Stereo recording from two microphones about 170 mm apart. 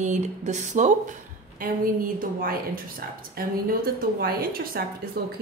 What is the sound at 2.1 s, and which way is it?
A woman's voice, 55° right (ahead or behind).